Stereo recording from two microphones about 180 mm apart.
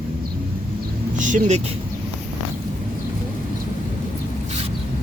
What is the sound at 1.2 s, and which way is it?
Speech, 45° right (ahead or behind).